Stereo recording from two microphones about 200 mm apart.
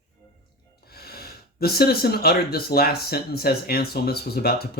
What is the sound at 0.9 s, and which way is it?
Speech, 50° left (ahead or behind).